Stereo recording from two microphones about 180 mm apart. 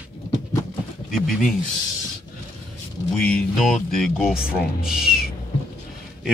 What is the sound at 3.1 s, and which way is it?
A man's voice, 5° left (ahead or behind).